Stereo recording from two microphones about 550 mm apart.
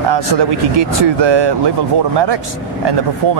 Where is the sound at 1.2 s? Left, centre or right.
Right.